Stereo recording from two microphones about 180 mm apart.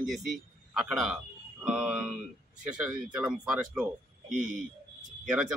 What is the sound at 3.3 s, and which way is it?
Speech, 5° right (ahead or behind).